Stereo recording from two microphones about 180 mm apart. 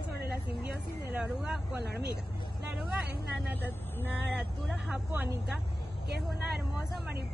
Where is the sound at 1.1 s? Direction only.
5° right (ahead or behind).